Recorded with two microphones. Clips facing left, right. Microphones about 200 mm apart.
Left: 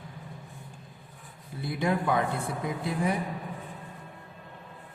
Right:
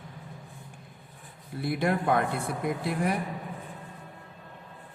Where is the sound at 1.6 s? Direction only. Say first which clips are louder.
Right 1 dB; 60° right (ahead or behind).